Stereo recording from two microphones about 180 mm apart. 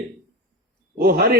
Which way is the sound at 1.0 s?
55° right (ahead or behind).